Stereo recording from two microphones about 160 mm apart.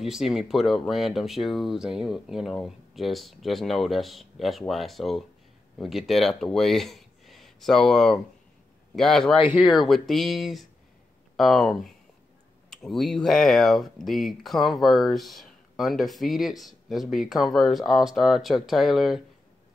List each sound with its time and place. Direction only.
0.0 s speech: centre (ahead or behind)